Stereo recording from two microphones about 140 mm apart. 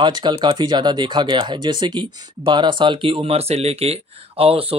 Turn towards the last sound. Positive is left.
turn(degrees=-45)  # may be behind; listen again after turning